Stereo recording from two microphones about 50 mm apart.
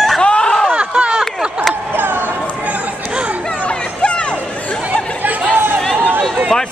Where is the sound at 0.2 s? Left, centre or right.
Centre.